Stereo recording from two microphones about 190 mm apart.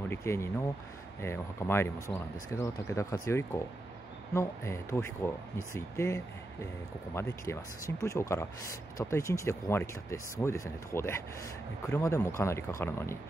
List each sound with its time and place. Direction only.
0.1 s speech: 15° left (ahead or behind)